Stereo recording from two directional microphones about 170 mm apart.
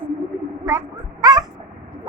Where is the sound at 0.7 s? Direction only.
20° right (ahead or behind).